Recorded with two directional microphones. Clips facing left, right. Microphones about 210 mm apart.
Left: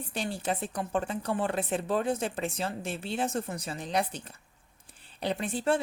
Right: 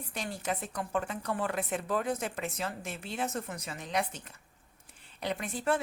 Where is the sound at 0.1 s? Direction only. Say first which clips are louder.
Left 3 dB; 30° left (ahead or behind).